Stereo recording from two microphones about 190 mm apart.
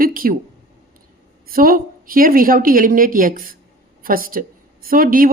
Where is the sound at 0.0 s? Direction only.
50° right (ahead or behind).